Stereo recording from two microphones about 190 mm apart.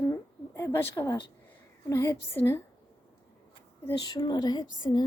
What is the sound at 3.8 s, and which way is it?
A woman's voice, 20° left (ahead or behind).